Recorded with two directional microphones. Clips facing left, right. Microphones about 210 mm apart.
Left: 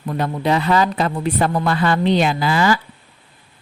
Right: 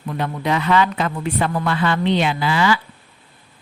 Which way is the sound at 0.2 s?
35° left (ahead or behind).